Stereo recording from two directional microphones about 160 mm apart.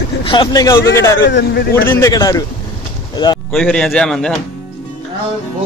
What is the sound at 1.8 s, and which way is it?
Speech, 15° left (ahead or behind).